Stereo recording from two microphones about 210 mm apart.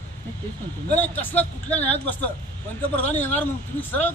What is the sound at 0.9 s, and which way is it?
Speech, 10° left (ahead or behind).